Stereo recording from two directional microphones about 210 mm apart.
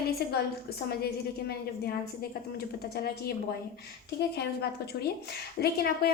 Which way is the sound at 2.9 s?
50° left (ahead or behind).